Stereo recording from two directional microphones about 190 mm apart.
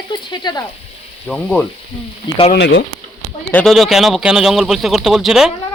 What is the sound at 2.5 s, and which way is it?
Speech, 70° left (ahead or behind).